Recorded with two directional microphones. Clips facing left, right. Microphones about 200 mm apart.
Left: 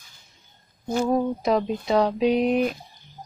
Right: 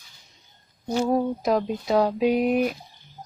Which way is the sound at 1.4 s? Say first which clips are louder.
Left 1 dB; centre (ahead or behind).